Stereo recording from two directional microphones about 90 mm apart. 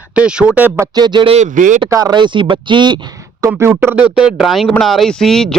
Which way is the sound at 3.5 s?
30° right (ahead or behind).